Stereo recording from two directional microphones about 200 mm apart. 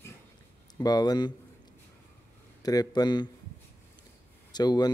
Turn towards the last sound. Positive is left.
turn(degrees=20)  # may be behind; listen again after turning